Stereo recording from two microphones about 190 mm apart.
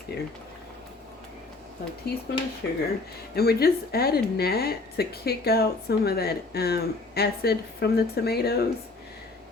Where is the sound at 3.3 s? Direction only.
55° left (ahead or behind).